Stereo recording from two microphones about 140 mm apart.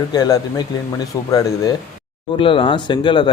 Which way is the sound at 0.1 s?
25° left (ahead or behind).